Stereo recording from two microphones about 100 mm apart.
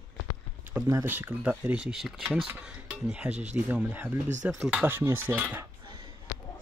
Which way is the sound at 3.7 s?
15° right (ahead or behind).